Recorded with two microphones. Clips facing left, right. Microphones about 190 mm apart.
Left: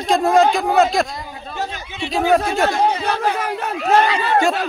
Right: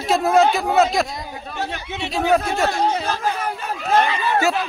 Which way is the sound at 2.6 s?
60° left (ahead or behind).